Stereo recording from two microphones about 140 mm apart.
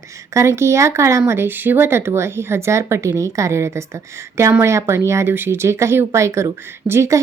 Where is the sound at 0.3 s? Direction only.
20° right (ahead or behind).